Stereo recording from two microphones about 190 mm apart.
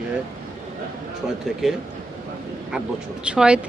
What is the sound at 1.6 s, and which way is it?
Speech, centre (ahead or behind).